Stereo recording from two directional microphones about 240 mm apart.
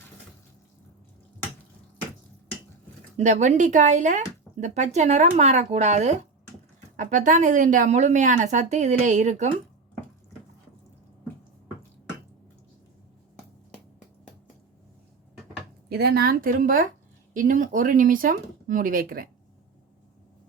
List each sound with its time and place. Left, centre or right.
3.2 s speech: right
15.9 s speech: right